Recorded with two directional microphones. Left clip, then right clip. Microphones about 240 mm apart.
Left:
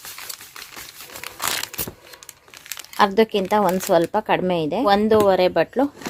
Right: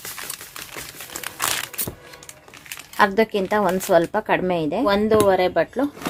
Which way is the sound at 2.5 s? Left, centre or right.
Left.